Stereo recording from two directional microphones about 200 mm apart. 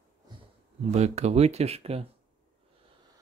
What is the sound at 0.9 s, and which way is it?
Speech, 35° right (ahead or behind).